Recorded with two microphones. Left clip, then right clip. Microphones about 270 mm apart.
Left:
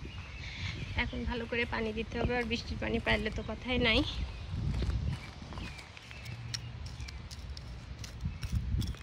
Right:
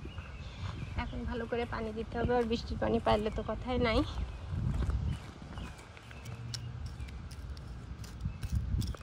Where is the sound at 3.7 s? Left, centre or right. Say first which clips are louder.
Left 3 dB; centre.